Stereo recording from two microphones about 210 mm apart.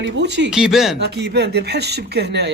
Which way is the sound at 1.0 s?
50° right (ahead or behind).